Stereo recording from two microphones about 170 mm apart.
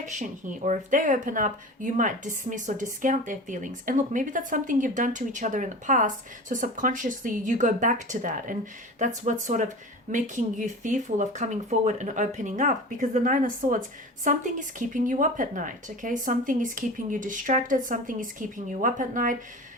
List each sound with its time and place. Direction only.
0.0 s speech: 45° right (ahead or behind)